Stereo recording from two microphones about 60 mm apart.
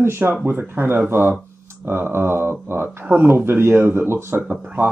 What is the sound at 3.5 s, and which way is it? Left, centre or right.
Speech, right.